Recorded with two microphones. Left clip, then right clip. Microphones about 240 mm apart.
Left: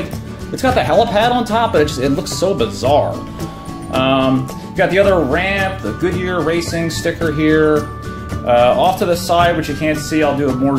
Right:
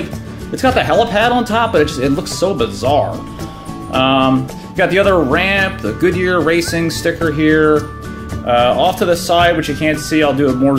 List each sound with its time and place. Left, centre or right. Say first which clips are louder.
0.6 s speech: right 1 dB; centre